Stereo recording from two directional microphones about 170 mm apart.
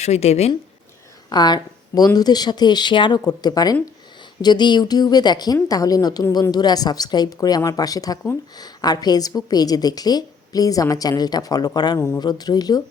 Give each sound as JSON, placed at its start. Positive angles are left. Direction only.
{"t": 0.0, "sound": "speech", "side_deg": 40}
{"t": 1.3, "sound": "a woman's voice", "side_deg": 25}
{"t": 11.9, "sound": "a woman's voice", "side_deg": 15}